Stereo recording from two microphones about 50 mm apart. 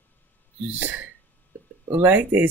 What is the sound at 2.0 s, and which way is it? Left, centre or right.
Speech, right.